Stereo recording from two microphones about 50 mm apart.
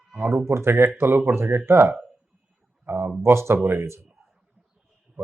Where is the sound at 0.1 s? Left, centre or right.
Right.